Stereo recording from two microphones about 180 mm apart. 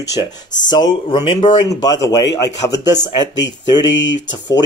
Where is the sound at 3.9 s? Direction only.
90° left.